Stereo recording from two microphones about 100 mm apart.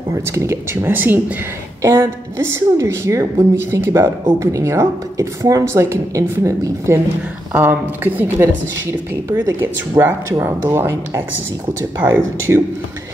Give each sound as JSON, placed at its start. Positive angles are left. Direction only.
{"t": 0.1, "sound": "a woman's voice", "side_deg": -30}
{"t": 7.5, "sound": "a woman's voice", "side_deg": -20}